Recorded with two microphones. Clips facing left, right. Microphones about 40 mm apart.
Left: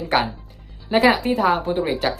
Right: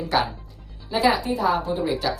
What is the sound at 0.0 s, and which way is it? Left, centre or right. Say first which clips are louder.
Speech: left 2 dB; left.